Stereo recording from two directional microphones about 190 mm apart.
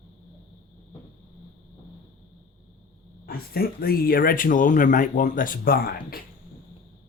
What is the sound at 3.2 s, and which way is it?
Speech, 55° left (ahead or behind).